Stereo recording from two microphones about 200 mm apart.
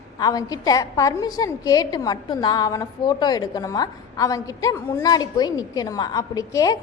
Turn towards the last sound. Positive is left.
turn(degrees=15)  # may be behind; listen again after turning